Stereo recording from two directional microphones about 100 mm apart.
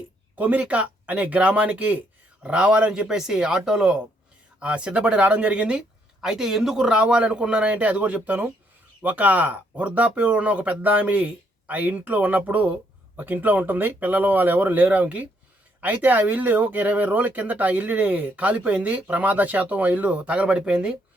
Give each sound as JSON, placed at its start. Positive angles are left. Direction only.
{"t": 0.3, "sound": "speech", "side_deg": -15}